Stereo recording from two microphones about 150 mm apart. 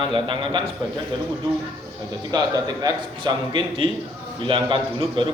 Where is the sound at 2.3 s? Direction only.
25° right (ahead or behind).